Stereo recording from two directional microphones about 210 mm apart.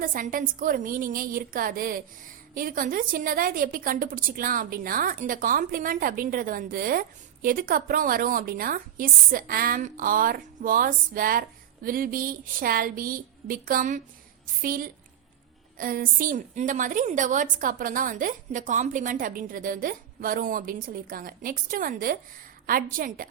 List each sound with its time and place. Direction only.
0.0 s a woman's voice: 40° right (ahead or behind)